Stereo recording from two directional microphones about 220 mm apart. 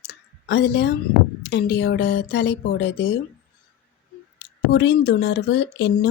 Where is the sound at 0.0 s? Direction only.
50° left (ahead or behind).